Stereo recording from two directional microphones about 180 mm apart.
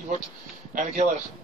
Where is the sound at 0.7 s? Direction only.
45° right (ahead or behind).